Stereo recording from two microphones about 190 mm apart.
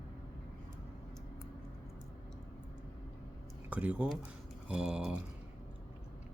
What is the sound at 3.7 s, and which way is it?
Speech, 5° right (ahead or behind).